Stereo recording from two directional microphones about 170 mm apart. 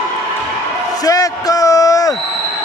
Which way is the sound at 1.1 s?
20° left (ahead or behind).